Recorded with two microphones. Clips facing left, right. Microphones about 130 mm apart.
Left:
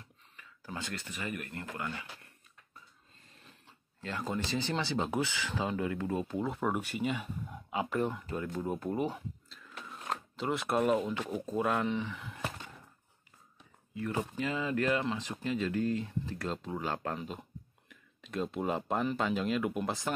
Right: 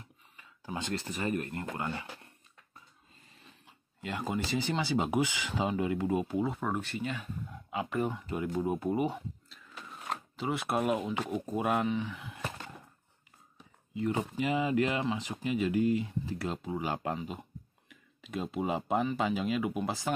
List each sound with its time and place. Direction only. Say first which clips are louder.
0.0 s a sound: right 1 dB; 20° right (ahead or behind)
1.0 s speech: right 6 dB; 35° right (ahead or behind)
3.6 s speech: right 2 dB; 15° right (ahead or behind)
6.5 s speech: left 1 dB; 5° left (ahead or behind); by 9.1 s 10° right (ahead or behind)
9.1 s a sound: right 2 dB; centre (ahead or behind)
10.3 s speech: even; centre (ahead or behind)
13.9 s speech: right 3 dB; 20° right (ahead or behind); by 20.1 s centre (ahead or behind)